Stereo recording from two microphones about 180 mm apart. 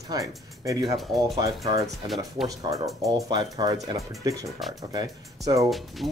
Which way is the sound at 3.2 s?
20° right (ahead or behind).